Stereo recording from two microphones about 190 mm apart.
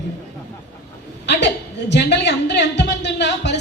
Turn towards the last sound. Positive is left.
turn(degrees=65)  # may be behind; listen again after turning